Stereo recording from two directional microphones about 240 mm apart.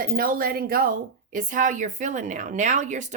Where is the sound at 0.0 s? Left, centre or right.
Right.